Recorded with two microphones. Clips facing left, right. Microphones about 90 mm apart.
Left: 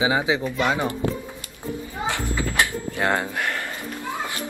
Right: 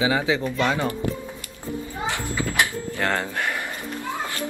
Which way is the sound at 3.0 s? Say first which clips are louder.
Left 2 dB; 15° left (ahead or behind).